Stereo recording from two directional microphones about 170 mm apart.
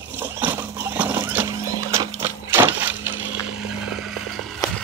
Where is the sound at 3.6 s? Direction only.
5° right (ahead or behind).